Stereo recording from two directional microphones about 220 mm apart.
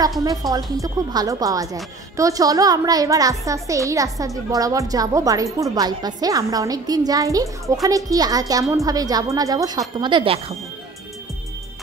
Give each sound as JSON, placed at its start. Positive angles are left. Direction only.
{"t": 0.2, "sound": "a child's voice", "side_deg": -15}